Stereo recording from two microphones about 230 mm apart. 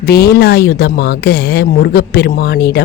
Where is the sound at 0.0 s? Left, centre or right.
Left.